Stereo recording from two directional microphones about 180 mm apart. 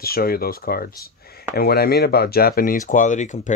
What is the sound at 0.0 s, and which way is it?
Speech, 55° left (ahead or behind).